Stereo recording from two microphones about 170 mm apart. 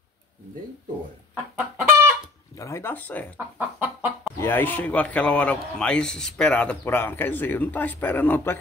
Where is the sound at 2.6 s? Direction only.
15° left (ahead or behind).